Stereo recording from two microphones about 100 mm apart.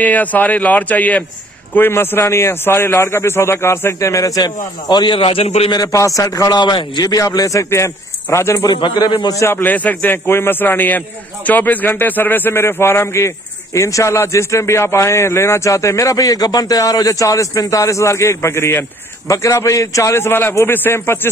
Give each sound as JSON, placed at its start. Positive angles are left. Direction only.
{"t": 0.0, "sound": "a man's voice", "side_deg": 15}
{"t": 5.7, "sound": "a man's voice", "side_deg": 35}
{"t": 8.8, "sound": "speech", "side_deg": 50}
{"t": 9.2, "sound": "a man's voice", "side_deg": 35}
{"t": 9.5, "sound": "a man's voice", "side_deg": 20}